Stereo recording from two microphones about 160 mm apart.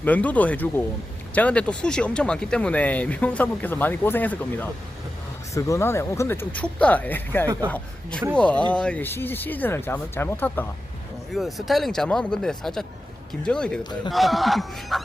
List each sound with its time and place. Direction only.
0.0 s speech: 10° left (ahead or behind)
7.4 s a man's voice: 25° right (ahead or behind)
8.4 s speech: 10° left (ahead or behind)
11.3 s speech: centre (ahead or behind)